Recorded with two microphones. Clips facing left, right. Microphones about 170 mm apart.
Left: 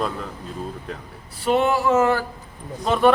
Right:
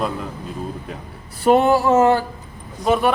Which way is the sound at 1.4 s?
40° right (ahead or behind).